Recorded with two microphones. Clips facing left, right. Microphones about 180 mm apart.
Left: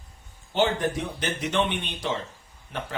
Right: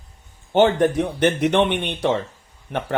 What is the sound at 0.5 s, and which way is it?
Speech, 60° right (ahead or behind).